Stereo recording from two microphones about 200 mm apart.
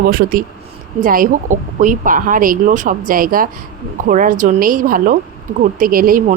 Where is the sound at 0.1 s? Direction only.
45° right (ahead or behind).